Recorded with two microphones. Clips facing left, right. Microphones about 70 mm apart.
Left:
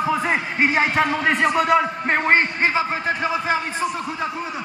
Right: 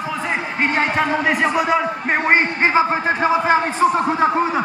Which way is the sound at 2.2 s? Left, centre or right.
Right.